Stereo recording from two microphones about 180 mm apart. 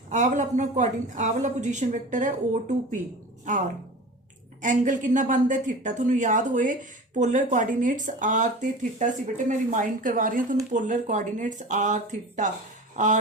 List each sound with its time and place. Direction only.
0.1 s speech: 45° right (ahead or behind)